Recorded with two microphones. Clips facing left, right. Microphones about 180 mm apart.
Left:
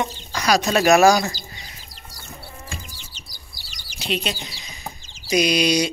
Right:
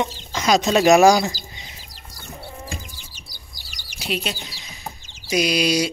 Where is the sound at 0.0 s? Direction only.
20° right (ahead or behind).